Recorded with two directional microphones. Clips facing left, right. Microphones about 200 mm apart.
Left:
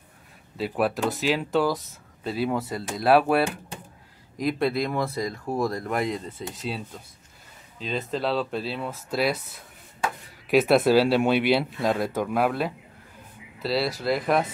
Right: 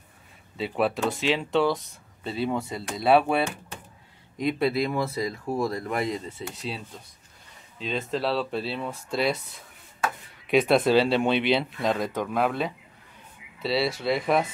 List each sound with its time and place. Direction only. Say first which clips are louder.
0.6 s speech: left 1 dB; centre (ahead or behind)
7.8 s speech: even; centre (ahead or behind)
10.5 s speech: left 1 dB; 5° left (ahead or behind)